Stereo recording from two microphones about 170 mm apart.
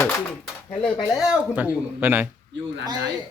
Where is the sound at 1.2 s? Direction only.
5° right (ahead or behind).